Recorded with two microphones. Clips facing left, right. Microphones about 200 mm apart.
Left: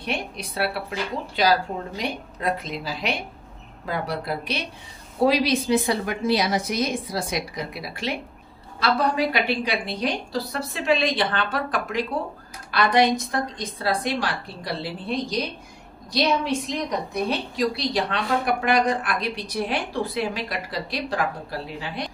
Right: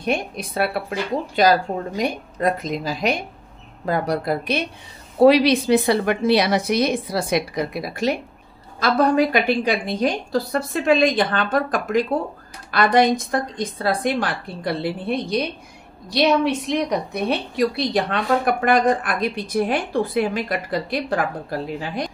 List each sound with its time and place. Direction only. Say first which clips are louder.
0.0 s a woman's voice: right 6 dB; 50° right (ahead or behind)
5.2 s a woman's voice: right 7 dB; 65° right (ahead or behind); by 22.1 s 45° right (ahead or behind)